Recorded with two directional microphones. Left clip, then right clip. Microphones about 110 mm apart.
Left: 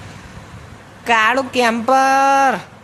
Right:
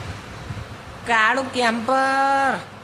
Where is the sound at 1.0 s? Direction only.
70° left (ahead or behind).